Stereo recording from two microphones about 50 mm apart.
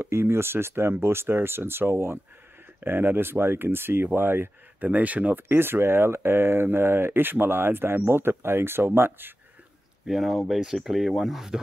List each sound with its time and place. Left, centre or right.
0.0 s speech: right
4.7 s speech: right
10.0 s speech: centre